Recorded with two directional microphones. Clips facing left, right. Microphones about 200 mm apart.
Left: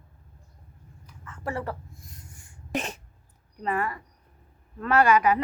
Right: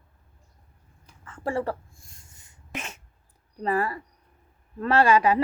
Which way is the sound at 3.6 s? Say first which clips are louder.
Right 3 dB; 35° right (ahead or behind).